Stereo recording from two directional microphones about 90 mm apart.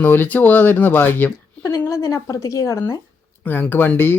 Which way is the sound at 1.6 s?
35° left (ahead or behind).